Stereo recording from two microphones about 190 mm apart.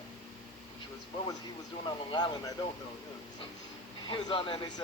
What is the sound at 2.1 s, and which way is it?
Speech, 20° left (ahead or behind).